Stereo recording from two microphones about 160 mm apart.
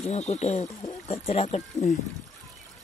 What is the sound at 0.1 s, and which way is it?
Speech, 45° left (ahead or behind).